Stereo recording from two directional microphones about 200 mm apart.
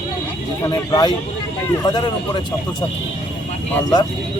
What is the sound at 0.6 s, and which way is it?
Speech, 20° left (ahead or behind).